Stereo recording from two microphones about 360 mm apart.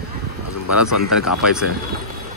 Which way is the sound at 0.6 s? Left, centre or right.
Left.